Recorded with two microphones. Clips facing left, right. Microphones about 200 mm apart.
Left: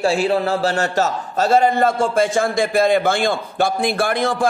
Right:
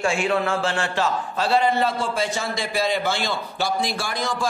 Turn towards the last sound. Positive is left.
turn(degrees=55)  # may be behind; listen again after turning